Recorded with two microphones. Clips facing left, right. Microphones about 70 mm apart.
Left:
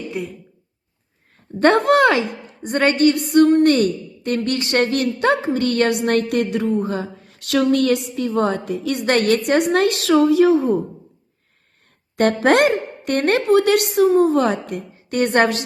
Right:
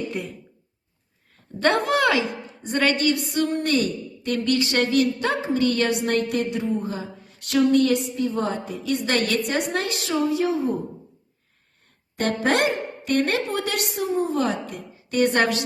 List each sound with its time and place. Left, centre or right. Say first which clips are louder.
0.1 s speech: left 3 dB; centre
1.5 s a woman's voice: left 7 dB; left
12.1 s speech: left 7 dB; left